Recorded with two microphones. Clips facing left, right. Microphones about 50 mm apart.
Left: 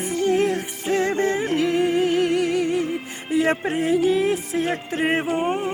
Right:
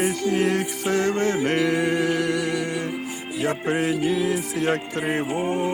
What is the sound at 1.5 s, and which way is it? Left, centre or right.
Humming, right.